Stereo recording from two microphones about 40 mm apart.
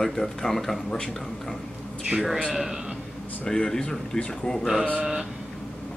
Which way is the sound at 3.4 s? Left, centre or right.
Centre.